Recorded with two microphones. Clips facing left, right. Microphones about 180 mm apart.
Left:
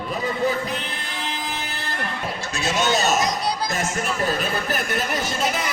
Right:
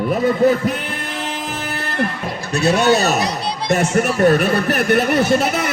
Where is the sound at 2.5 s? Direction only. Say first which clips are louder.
Right 8 dB; 65° right (ahead or behind).